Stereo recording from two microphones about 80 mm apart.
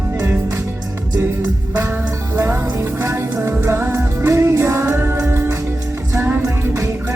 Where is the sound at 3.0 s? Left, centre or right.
Right.